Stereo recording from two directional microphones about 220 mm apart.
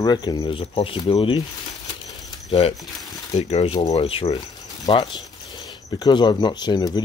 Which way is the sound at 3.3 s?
30° left (ahead or behind).